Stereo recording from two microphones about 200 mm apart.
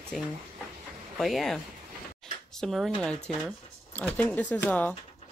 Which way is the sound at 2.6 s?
Centre (ahead or behind).